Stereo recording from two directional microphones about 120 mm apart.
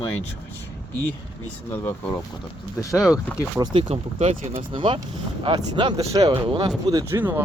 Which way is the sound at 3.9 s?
60° right (ahead or behind).